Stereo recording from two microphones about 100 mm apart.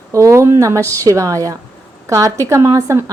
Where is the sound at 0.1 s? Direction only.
30° right (ahead or behind).